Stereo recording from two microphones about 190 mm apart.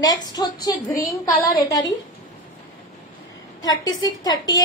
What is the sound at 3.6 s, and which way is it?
Speech, 20° left (ahead or behind).